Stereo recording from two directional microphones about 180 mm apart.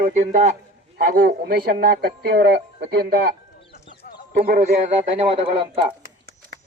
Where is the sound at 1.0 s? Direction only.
55° right (ahead or behind).